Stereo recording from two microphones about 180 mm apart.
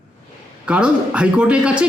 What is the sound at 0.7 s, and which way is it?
A man's voice, 5° right (ahead or behind).